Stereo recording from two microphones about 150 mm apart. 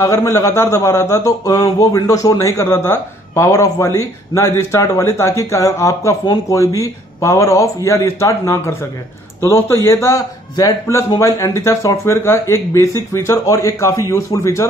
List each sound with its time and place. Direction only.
0.0 s a man's voice: 20° left (ahead or behind)